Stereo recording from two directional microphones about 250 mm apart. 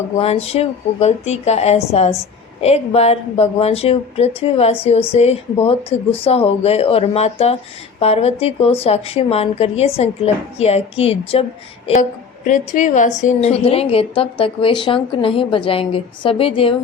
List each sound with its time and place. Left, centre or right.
0.2 s a woman's voice: left
12.5 s a woman's voice: left